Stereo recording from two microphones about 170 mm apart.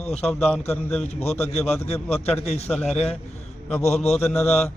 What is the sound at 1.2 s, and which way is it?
A man's voice, 40° left (ahead or behind).